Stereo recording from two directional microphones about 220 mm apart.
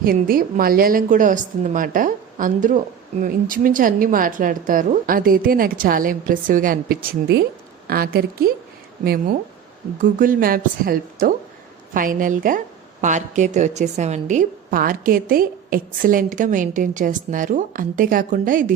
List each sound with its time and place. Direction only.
0.0 s a woman's voice: 40° right (ahead or behind)